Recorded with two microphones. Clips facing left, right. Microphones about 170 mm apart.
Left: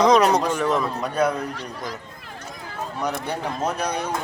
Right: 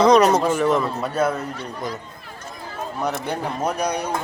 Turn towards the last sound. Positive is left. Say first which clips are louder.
# right 2 dB
turn(degrees=-10)  # may be behind; listen again after turning